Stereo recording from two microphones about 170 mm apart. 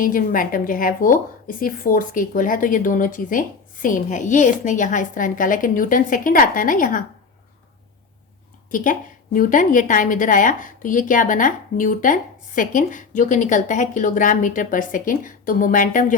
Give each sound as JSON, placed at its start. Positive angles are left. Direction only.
{"t": 0.0, "sound": "a woman's voice", "side_deg": 55}
{"t": 8.7, "sound": "a woman's voice", "side_deg": 50}